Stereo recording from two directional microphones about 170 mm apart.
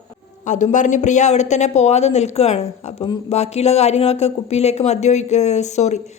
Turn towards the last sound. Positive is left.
turn(degrees=40)  # may be behind; listen again after turning